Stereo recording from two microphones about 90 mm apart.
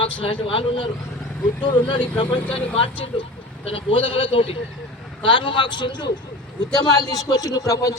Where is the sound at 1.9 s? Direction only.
70° left (ahead or behind); by 4.5 s 90° left.